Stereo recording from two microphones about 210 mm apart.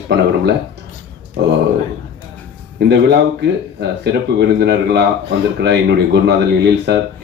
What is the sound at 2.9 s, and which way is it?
Speech, 55° right (ahead or behind).